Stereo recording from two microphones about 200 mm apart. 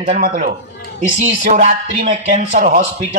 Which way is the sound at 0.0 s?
40° right (ahead or behind).